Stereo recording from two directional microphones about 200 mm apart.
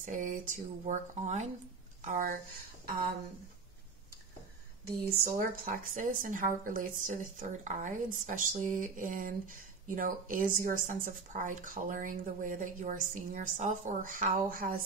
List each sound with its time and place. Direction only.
0.0 s speech: 40° right (ahead or behind)
5.4 s speech: 45° right (ahead or behind)